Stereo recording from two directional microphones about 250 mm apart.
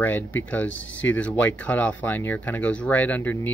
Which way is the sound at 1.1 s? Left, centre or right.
Centre.